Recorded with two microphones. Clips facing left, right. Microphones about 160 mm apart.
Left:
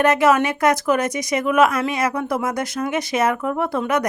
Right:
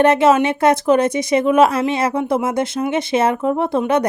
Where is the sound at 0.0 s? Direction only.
25° right (ahead or behind).